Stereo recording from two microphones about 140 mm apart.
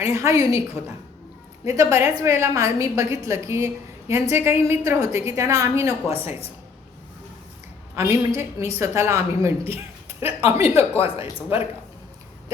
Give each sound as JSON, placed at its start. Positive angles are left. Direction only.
{"t": 0.0, "sound": "a woman's voice", "side_deg": -20}
{"t": 7.9, "sound": "a woman's voice", "side_deg": -20}
{"t": 10.6, "sound": "speech", "side_deg": 45}